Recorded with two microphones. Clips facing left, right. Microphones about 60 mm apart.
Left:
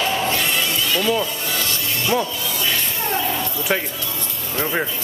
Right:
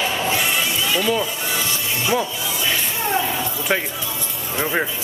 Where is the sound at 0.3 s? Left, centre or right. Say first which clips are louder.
Even; centre.